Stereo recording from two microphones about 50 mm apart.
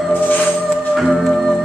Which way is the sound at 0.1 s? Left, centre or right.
Left.